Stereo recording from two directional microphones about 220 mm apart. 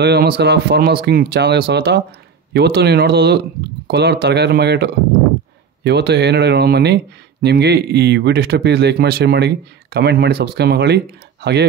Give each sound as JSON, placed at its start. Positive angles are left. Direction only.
{"t": 0.0, "sound": "speech", "side_deg": -45}